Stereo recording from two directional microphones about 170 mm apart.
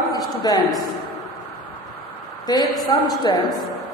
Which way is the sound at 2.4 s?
20° left (ahead or behind).